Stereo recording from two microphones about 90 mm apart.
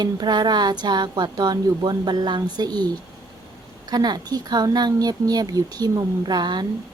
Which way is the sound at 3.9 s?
45° right (ahead or behind).